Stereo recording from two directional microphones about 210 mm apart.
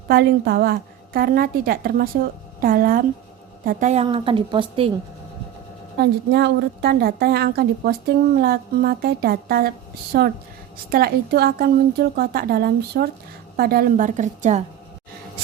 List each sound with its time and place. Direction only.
0.1 s a woman's voice: 50° right (ahead or behind)
4.0 s a woman's voice: 25° right (ahead or behind)
6.0 s a woman's voice: 50° right (ahead or behind); by 14.6 s 35° right (ahead or behind)